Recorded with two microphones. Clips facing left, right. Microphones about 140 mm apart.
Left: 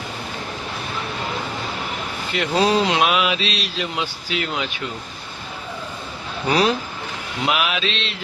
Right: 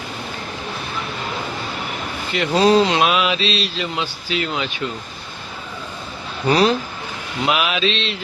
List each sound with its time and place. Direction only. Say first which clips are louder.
2.3 s speech: right 4 dB; 5° left (ahead or behind)
6.5 s speech: right 3 dB; 5° left (ahead or behind)